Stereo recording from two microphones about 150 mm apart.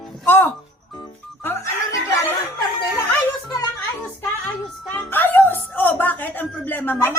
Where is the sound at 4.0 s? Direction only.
15° left (ahead or behind).